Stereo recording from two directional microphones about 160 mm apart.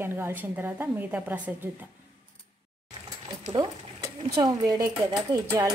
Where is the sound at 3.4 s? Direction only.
35° right (ahead or behind).